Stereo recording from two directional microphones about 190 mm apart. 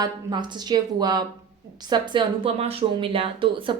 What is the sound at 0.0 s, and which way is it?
Speech, 20° right (ahead or behind).